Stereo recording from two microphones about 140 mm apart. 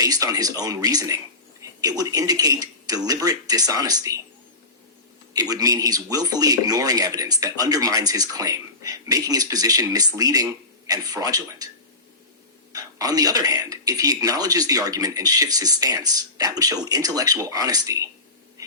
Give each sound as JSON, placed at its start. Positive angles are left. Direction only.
{"t": 0.0, "sound": "a man's voice", "side_deg": -25}
{"t": 5.3, "sound": "a man's voice", "side_deg": -25}
{"t": 12.7, "sound": "a man's voice", "side_deg": -25}